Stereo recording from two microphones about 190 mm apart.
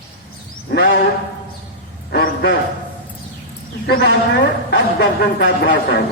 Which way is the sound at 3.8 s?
55° left (ahead or behind).